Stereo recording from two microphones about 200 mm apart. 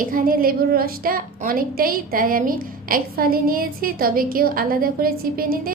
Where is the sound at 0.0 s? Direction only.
45° right (ahead or behind).